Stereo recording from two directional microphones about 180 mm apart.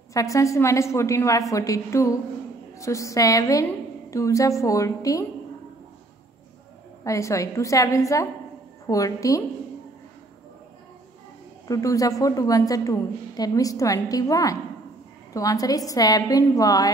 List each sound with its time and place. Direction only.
0.1 s a woman's voice: 20° left (ahead or behind)
7.1 s a woman's voice: 15° left (ahead or behind)
11.6 s a woman's voice: 20° left (ahead or behind)